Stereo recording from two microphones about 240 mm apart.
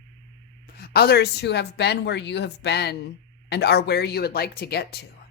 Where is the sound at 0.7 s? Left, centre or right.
Left.